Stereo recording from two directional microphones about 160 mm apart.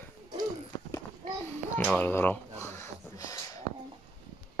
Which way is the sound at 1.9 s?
10° left (ahead or behind).